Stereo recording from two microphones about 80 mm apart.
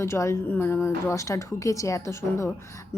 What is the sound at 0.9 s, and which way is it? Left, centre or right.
A woman's voice, left.